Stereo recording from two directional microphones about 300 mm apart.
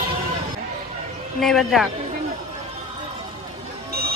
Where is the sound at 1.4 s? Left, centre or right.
Centre.